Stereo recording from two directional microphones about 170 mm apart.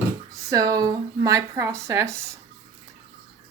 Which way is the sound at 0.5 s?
20° right (ahead or behind).